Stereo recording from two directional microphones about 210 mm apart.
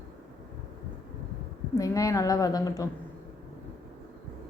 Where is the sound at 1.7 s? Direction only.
15° left (ahead or behind).